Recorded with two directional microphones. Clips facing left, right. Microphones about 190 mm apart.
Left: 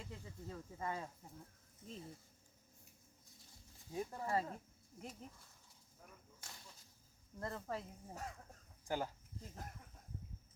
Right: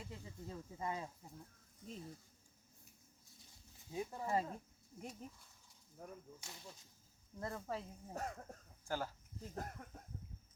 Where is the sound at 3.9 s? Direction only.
5° right (ahead or behind).